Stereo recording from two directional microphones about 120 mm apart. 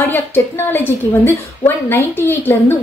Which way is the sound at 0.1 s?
20° left (ahead or behind).